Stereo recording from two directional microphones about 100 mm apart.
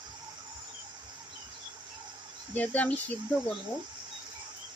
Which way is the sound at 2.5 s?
15° left (ahead or behind).